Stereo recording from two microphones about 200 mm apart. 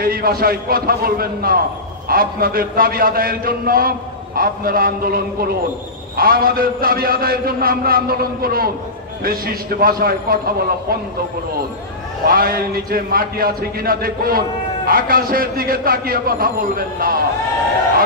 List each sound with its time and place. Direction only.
0.0 s a man's voice: 50° right (ahead or behind)
12.3 s a man's voice: 45° right (ahead or behind)